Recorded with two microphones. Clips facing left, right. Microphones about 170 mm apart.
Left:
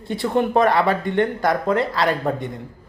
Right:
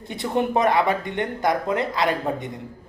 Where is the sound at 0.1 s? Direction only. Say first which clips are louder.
Left 3 dB; 20° right (ahead or behind).